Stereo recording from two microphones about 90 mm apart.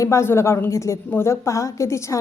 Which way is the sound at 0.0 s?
30° left (ahead or behind).